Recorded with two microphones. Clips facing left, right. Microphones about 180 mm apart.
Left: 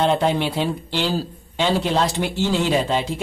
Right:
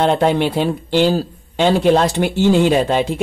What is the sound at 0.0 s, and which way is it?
Speech, 55° right (ahead or behind).